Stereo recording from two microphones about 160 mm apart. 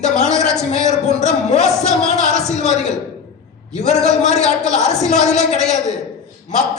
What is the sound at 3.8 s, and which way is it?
Speech, 45° left (ahead or behind).